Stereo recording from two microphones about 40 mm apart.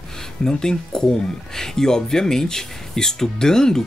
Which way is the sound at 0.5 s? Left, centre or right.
Centre.